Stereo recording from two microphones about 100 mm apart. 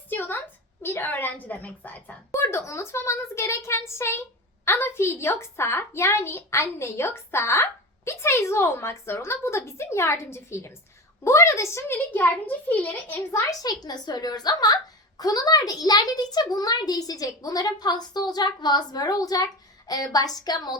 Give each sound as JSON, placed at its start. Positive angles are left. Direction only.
{"t": 0.1, "sound": "a sound", "side_deg": 20}
{"t": 2.3, "sound": "a woman's voice", "side_deg": 30}
{"t": 13.5, "sound": "a child's voice", "side_deg": 40}